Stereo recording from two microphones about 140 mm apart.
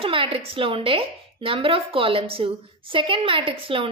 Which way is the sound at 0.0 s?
40° right (ahead or behind).